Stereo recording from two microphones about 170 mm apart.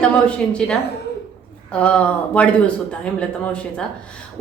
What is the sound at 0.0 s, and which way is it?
A woman's voice, 5° left (ahead or behind).